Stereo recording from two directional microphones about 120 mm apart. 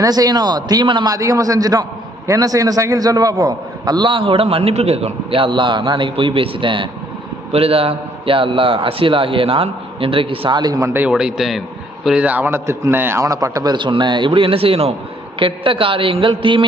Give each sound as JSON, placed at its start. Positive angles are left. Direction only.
{"t": 0.0, "sound": "a man's voice", "side_deg": -30}
{"t": 10.6, "sound": "a man's voice", "side_deg": -30}
{"t": 11.1, "sound": "a man's voice", "side_deg": -5}